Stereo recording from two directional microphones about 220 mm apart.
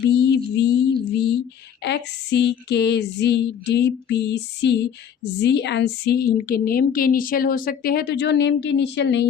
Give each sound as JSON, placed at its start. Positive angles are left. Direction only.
{"t": 0.1, "sound": "child singing", "side_deg": 50}
{"t": 1.8, "sound": "a woman's voice", "side_deg": 50}